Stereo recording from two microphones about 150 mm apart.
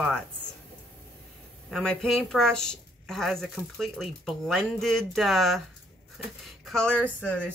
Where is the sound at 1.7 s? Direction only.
5° left (ahead or behind).